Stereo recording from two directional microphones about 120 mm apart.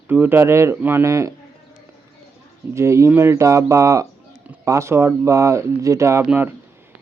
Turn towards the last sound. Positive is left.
turn(degrees=-15)  # may be behind; listen again after turning